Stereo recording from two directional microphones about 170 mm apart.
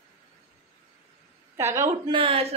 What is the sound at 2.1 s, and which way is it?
Speech, 30° right (ahead or behind).